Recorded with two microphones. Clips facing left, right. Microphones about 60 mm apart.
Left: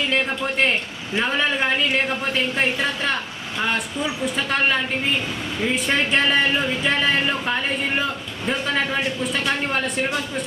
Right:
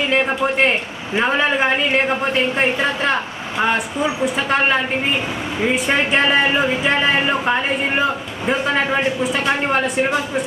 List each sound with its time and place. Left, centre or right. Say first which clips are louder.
0.0 s a man's voice: right 5 dB; centre